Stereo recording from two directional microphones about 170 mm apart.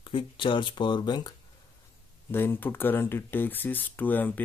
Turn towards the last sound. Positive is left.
turn(degrees=10)  # may be behind; listen again after turning